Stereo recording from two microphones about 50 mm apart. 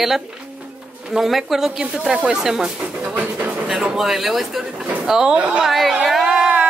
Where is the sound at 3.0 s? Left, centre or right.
Right.